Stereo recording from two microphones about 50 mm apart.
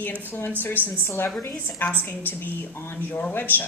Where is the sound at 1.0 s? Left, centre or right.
Left.